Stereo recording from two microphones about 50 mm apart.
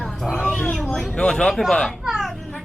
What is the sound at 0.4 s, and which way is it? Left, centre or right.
Roaring cats, centre.